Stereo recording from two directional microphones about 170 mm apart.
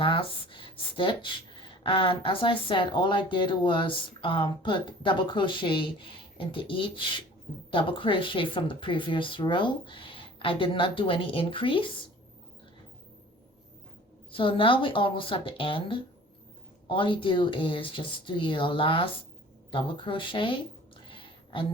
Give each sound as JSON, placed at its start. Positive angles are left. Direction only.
{"t": 0.0, "sound": "speech", "side_deg": 30}
{"t": 14.3, "sound": "speech", "side_deg": 30}
{"t": 21.1, "sound": "a sound", "side_deg": 30}